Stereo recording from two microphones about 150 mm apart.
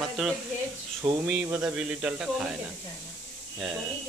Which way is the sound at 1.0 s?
20° right (ahead or behind).